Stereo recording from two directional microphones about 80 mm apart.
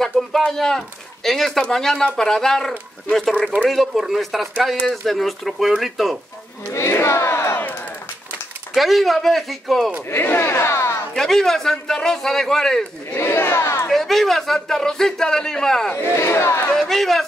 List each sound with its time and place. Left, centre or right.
0.5 s speech: centre
6.7 s crowd: left
8.7 s speech: centre
10.0 s speech: left
11.1 s speech: centre
13.1 s battle cry: left
13.8 s speech: centre
16.2 s speech: left
16.7 s speech: centre